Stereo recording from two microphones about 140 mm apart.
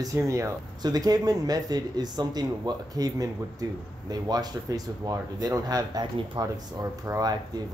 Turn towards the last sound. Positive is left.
turn(degrees=-25)  # may be behind; listen again after turning